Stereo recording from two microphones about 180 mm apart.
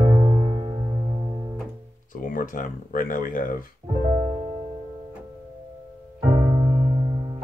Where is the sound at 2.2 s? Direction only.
50° left (ahead or behind).